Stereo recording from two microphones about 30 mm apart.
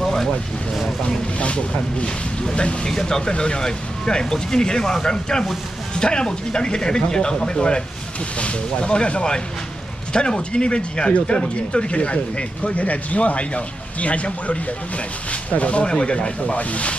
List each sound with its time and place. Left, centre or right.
0.0 s vehicle: centre
1.0 s speech: left
2.9 s speech: centre; by 12.8 s left
12.8 s speech: left
15.8 s speech: left
16.5 s speech: left